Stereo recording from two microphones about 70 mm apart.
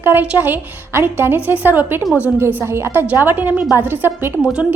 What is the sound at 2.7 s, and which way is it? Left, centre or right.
Speech, right.